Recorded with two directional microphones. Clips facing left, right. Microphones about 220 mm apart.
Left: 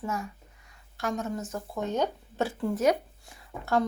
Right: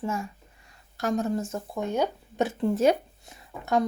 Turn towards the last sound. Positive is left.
turn(degrees=-20)  # may be behind; listen again after turning